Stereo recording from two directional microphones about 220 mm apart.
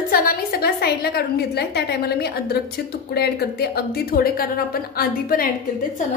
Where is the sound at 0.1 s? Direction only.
40° left (ahead or behind).